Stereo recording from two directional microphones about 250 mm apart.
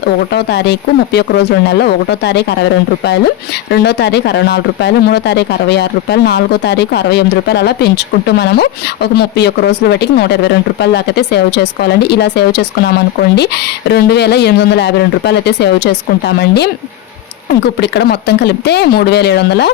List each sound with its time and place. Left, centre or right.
0.3 s speech: left
3.7 s speech: left
13.9 s speech: left